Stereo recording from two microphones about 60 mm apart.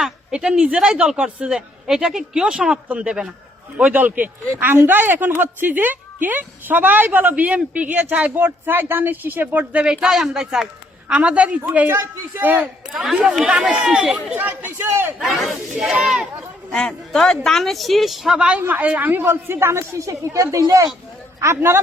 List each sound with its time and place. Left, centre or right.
0.0 s a woman's voice: centre
8.4 s a woman's voice: right
9.8 s speech: centre
11.1 s a woman's voice: right
11.9 s a woman's voice: right
12.9 s a woman's voice: centre
14.3 s a woman's voice: right
14.8 s speech: right
15.2 s a woman's voice: centre
16.7 s a woman's voice: centre
18.3 s a woman's voice: centre
19.2 s speech: right